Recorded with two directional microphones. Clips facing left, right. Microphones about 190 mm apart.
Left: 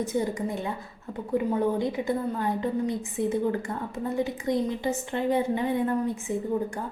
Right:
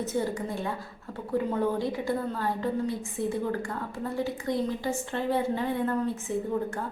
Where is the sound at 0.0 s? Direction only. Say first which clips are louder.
Left 2 dB; 15° left (ahead or behind).